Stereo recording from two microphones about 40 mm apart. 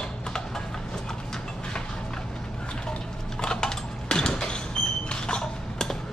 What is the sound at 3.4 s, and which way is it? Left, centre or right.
Typing, centre.